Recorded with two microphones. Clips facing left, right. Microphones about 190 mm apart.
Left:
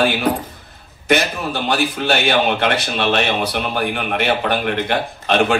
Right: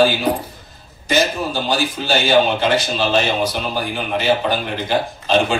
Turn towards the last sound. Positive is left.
turn(degrees=60)  # may be behind; listen again after turning